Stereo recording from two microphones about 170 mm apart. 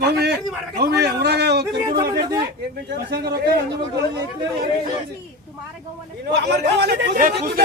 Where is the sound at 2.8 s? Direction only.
75° right (ahead or behind).